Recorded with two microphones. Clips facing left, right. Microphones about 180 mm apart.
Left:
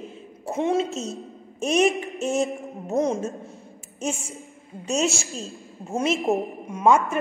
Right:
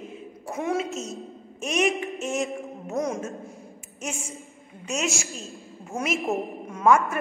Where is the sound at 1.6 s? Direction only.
35° left (ahead or behind).